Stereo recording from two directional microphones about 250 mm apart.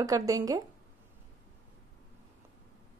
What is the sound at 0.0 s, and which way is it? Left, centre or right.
Speech, centre.